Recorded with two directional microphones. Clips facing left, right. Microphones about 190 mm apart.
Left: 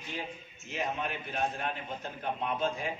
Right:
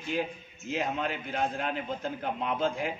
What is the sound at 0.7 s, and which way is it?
A man's voice, 90° right.